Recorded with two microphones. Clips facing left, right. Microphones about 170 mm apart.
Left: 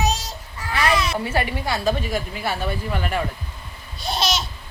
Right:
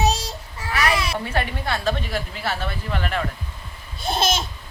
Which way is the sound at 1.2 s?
5° left (ahead or behind).